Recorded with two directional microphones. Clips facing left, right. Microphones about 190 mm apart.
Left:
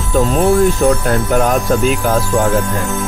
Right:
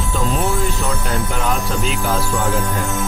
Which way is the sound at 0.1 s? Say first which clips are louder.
Left 9 dB; 50° left (ahead or behind).